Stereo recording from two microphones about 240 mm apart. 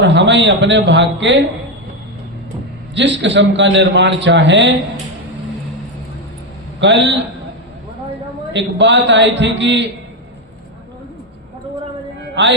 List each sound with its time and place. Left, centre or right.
0.0 s a man's voice: right
2.9 s a man's voice: right
6.7 s a man's voice: right
8.5 s a man's voice: right
12.3 s speech: right